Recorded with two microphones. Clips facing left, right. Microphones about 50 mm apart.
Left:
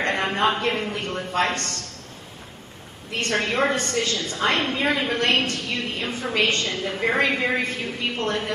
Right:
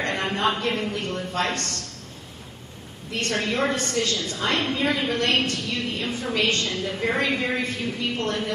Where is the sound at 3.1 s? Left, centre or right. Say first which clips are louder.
Left 2 dB; centre.